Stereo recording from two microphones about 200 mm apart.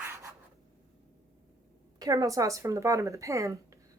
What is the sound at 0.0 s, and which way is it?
Writing, 15° right (ahead or behind).